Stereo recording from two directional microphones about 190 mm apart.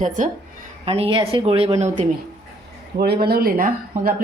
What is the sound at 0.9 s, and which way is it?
Speech, 30° right (ahead or behind).